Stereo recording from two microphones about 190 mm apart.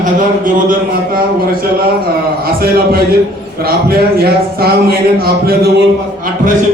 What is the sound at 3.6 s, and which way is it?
Speech, 55° right (ahead or behind).